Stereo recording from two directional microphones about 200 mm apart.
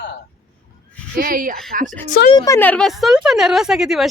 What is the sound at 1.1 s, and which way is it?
Speech, 45° right (ahead or behind).